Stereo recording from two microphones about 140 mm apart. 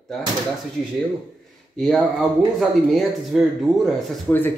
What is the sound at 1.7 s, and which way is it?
Speech, 5° left (ahead or behind).